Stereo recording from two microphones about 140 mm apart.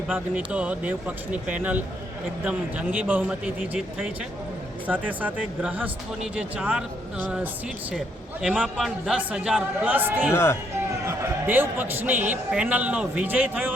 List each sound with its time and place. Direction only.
0.1 s a man's voice: 10° right (ahead or behind)
7.9 s a man's voice: 5° right (ahead or behind)
10.3 s speech: 15° left (ahead or behind)
11.0 s a man's voice: 20° right (ahead or behind)